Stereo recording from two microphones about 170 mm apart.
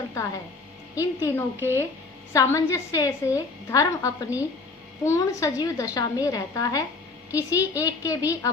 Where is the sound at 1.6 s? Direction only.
15° left (ahead or behind).